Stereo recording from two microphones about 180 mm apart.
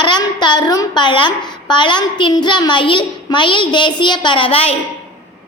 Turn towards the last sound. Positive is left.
turn(degrees=35)  # may be behind; listen again after turning